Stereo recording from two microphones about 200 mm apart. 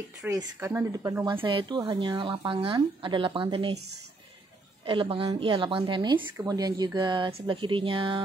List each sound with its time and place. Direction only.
0.2 s speech: 15° right (ahead or behind)
1.4 s speech: 25° right (ahead or behind)
4.8 s speech: 25° right (ahead or behind)